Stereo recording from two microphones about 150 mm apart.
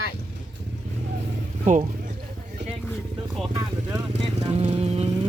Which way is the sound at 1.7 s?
55° right (ahead or behind).